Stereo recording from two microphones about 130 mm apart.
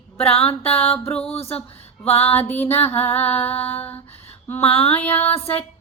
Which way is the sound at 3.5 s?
50° left (ahead or behind).